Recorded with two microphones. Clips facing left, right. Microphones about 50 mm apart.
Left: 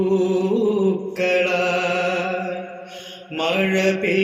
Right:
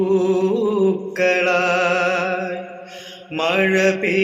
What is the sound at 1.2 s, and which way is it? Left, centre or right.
Mantra, right.